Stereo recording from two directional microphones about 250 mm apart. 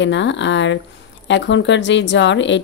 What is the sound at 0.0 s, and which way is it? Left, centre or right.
Speech, left.